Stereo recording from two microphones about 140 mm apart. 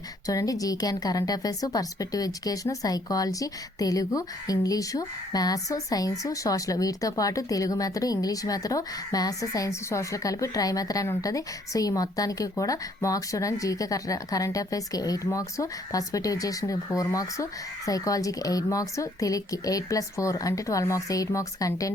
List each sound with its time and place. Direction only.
0.3 s a woman's voice: 25° left (ahead or behind)